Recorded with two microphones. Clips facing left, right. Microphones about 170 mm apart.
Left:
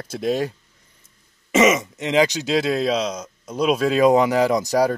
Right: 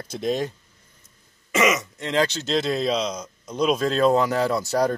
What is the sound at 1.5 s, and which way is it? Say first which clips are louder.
Throat clearing: left 5 dB; 25° left (ahead or behind).